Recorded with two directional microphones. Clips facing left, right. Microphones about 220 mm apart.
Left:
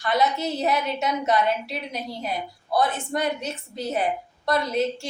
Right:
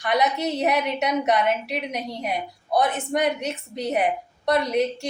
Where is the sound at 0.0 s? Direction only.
15° right (ahead or behind).